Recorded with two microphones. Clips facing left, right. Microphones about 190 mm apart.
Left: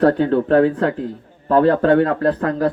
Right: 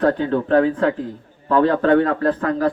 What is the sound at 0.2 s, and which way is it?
A man's voice, 45° left (ahead or behind).